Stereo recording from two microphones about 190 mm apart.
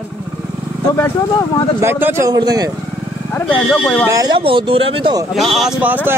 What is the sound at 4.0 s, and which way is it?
Speech, 15° right (ahead or behind).